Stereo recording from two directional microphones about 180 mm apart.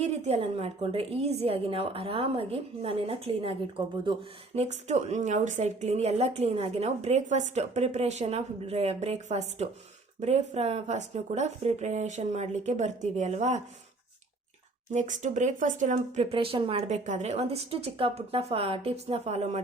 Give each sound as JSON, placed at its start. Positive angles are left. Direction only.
{"t": 0.0, "sound": "a woman's voice", "side_deg": -35}
{"t": 14.9, "sound": "a woman's voice", "side_deg": -45}